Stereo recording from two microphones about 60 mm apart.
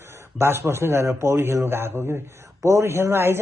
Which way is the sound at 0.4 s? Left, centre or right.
Right.